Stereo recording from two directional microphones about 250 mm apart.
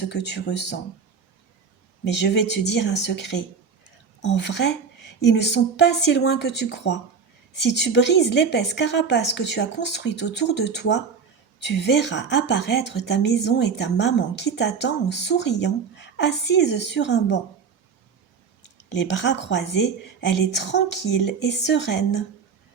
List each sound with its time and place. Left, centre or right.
0.1 s a woman's voice: left
2.0 s a woman's voice: left
18.9 s a woman's voice: left